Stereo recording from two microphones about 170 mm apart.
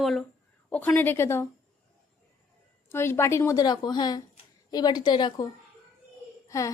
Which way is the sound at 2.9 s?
15° left (ahead or behind).